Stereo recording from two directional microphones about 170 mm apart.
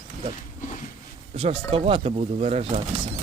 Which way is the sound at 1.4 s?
35° right (ahead or behind).